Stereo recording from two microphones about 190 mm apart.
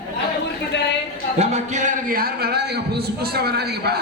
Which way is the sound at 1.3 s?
35° right (ahead or behind).